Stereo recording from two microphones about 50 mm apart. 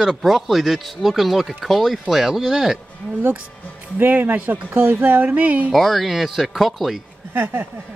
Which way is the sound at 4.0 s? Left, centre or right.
Right.